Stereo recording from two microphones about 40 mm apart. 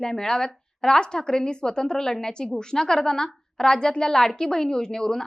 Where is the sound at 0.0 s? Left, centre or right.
Centre.